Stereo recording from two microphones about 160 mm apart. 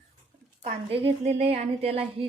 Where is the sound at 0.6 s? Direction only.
40° right (ahead or behind).